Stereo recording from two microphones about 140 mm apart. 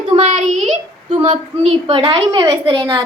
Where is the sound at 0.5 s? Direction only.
55° right (ahead or behind).